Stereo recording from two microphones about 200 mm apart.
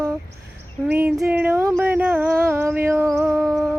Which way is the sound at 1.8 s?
10° right (ahead or behind).